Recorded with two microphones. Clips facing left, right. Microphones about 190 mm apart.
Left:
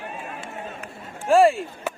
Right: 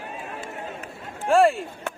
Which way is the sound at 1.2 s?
Centre (ahead or behind).